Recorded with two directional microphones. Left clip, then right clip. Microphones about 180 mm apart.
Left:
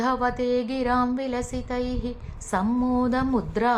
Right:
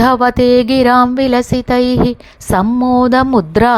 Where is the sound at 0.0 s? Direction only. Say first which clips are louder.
Right 14 dB; 45° right (ahead or behind).